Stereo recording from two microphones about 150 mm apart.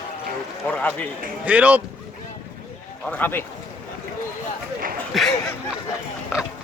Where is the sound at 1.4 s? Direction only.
10° right (ahead or behind).